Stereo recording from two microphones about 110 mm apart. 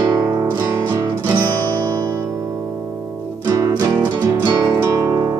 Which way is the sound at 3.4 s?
30° right (ahead or behind).